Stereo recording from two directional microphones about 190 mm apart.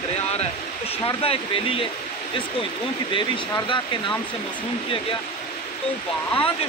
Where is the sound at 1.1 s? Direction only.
30° left (ahead or behind).